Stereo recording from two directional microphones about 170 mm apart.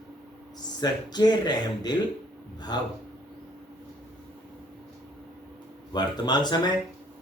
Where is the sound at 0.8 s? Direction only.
25° left (ahead or behind).